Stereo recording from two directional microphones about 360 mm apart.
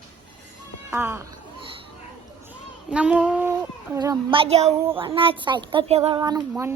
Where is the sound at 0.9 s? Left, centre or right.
Centre.